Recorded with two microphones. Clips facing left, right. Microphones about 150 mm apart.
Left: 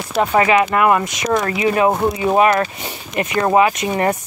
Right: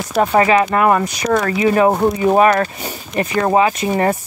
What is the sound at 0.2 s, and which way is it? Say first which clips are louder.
Speech: right 1 dB; 35° right (ahead or behind).